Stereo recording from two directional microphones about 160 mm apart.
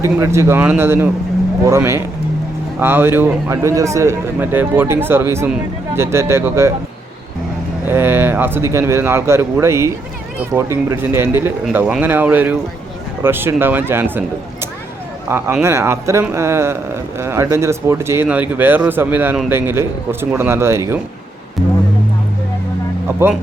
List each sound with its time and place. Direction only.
0.0 s speech: 15° right (ahead or behind)
7.9 s speech: 15° right (ahead or behind)